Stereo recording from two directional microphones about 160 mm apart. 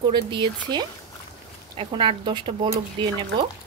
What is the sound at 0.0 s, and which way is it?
Speech, 30° right (ahead or behind).